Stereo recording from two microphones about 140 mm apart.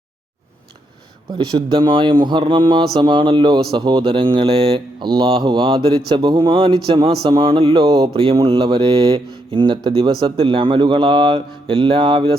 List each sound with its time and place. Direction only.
1.3 s speech: 35° right (ahead or behind)